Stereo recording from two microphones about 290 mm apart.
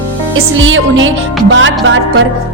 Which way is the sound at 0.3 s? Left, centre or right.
Right.